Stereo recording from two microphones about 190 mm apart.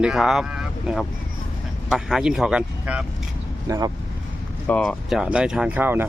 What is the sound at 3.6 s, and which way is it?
Speech, 15° right (ahead or behind).